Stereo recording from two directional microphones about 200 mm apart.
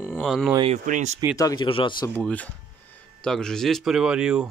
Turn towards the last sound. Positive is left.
turn(degrees=-5)  # may be behind; listen again after turning